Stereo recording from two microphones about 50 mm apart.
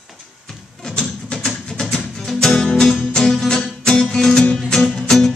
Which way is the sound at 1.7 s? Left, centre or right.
Centre.